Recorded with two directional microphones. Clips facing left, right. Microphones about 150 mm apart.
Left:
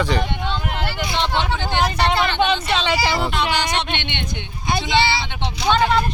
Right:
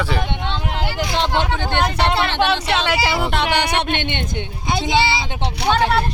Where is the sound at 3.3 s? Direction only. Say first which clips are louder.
Right 2 dB; 60° right (ahead or behind); by 5.5 s 35° right (ahead or behind).